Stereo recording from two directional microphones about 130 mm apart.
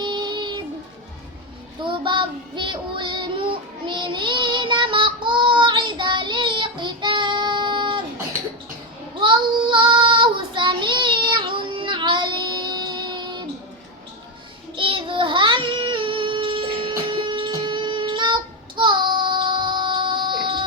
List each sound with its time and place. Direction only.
0.0 s child singing: 35° right (ahead or behind)
1.8 s child singing: 40° right (ahead or behind)
9.2 s child singing: 40° right (ahead or behind)
14.8 s child singing: 40° right (ahead or behind)
17.2 s music: 40° right (ahead or behind)
18.8 s child singing: 35° right (ahead or behind)